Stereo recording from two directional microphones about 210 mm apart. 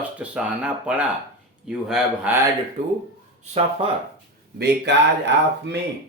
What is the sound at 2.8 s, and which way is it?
Speech, 35° right (ahead or behind).